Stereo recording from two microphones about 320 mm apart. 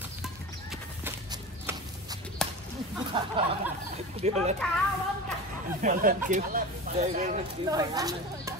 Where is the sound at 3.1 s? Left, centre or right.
Centre.